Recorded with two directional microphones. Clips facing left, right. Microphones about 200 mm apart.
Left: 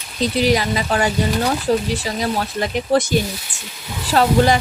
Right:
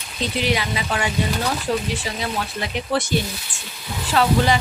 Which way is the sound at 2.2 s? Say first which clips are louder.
Left 5 dB; 40° left (ahead or behind).